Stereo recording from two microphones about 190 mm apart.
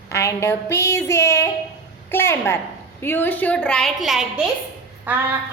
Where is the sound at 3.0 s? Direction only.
10° left (ahead or behind).